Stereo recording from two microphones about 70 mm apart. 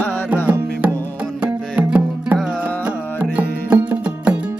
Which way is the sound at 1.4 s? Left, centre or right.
Centre.